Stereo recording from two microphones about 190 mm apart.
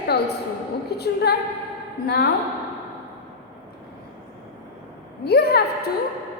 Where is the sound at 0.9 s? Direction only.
60° left (ahead or behind).